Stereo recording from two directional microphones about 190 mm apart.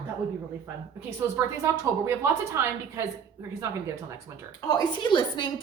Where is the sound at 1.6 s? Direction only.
15° right (ahead or behind).